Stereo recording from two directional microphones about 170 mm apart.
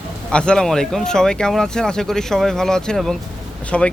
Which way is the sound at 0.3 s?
5° left (ahead or behind).